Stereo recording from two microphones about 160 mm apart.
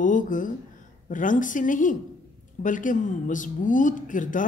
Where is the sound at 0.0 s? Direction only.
55° left (ahead or behind).